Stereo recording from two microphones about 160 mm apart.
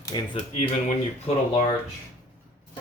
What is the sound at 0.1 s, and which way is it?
Speech, 25° left (ahead or behind).